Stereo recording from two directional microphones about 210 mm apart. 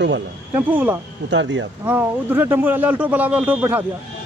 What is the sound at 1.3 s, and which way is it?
Speech, 65° right (ahead or behind).